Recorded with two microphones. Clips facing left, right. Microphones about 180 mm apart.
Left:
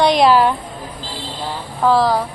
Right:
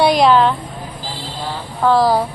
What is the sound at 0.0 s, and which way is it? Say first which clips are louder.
Speech: even; centre (ahead or behind).